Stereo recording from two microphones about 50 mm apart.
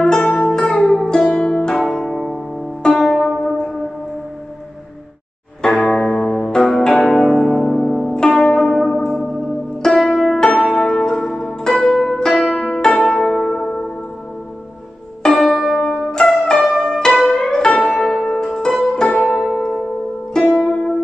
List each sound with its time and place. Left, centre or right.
0.0 s music: centre
2.9 s zither: centre
5.6 s music: centre
8.1 s zither: centre
12.5 s music: centre
13.1 s music: centre
15.2 s church bell: centre
15.8 s music: centre
16.8 s music: centre
19.5 s music: centre